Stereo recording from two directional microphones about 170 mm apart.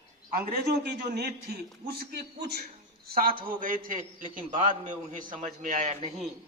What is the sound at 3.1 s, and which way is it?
A man's voice, 60° right (ahead or behind).